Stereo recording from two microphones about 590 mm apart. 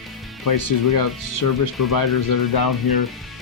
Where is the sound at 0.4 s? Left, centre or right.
Left.